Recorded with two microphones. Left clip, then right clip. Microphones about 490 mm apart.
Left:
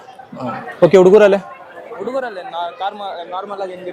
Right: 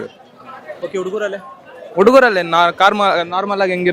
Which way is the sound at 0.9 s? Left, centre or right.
Left.